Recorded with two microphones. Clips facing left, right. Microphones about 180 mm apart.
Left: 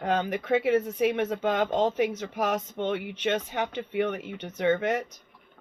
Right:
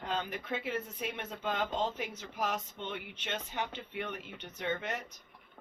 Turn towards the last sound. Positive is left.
turn(degrees=90)